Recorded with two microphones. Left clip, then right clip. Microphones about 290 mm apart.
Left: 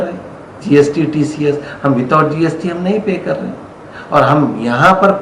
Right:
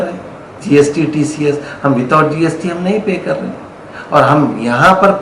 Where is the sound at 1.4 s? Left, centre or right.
Centre.